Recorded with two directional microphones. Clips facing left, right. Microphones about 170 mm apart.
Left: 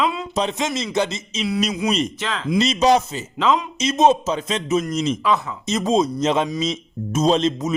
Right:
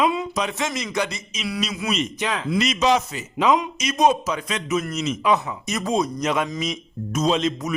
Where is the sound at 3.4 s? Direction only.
15° right (ahead or behind).